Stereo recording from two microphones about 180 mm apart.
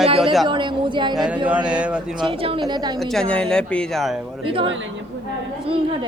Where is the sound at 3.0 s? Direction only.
Centre (ahead or behind).